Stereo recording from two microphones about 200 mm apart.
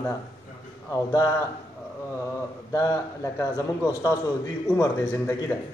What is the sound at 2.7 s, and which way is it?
A man's voice, 15° left (ahead or behind).